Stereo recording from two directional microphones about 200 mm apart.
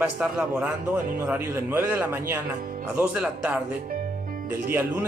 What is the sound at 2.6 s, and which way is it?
Music, 45° right (ahead or behind).